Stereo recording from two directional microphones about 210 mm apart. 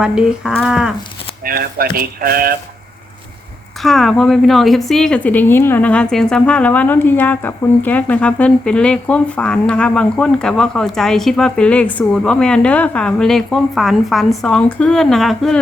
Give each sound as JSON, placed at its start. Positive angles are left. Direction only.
{"t": 0.0, "sound": "a woman's voice", "side_deg": -5}
{"t": 1.5, "sound": "speech", "side_deg": -45}
{"t": 3.8, "sound": "a woman's voice", "side_deg": 0}